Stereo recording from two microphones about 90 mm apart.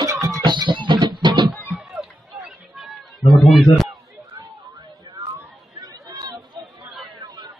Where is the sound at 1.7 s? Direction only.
10° right (ahead or behind).